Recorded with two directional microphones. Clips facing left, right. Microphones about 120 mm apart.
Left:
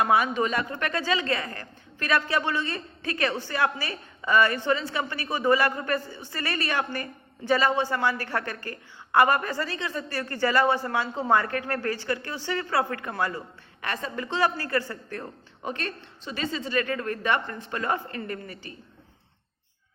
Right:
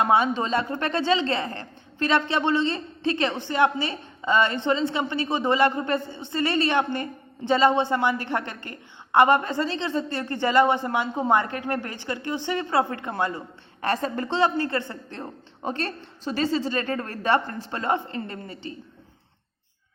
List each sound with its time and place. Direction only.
0.0 s a woman's voice: 25° right (ahead or behind)
13.8 s a woman's voice: 40° right (ahead or behind)
14.3 s a woman's voice: 25° right (ahead or behind)